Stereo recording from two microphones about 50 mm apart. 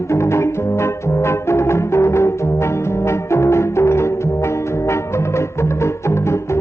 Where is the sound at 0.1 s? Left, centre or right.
Left.